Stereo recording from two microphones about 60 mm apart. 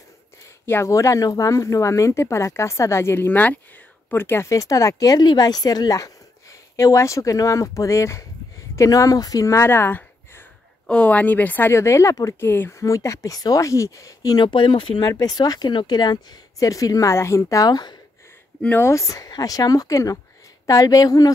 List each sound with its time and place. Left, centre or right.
0.8 s speech: left
4.2 s speech: left
4.5 s speech: left
8.7 s speech: left
9.7 s a sound: left
10.9 s speech: left
11.7 s speech: left
12.4 s speech: left
12.7 s speech: left
15.0 s speech: left
16.5 s speech: left
17.1 s speech: left
18.8 s speech: left